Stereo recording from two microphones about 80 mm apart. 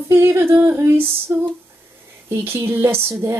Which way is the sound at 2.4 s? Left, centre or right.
Right.